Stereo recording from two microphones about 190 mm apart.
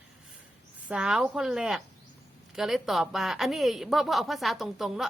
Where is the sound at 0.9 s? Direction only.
5° right (ahead or behind).